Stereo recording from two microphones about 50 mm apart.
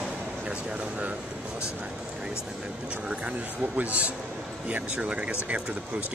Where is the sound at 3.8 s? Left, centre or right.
Right.